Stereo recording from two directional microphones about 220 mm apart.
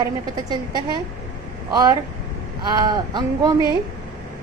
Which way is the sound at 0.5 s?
20° right (ahead or behind).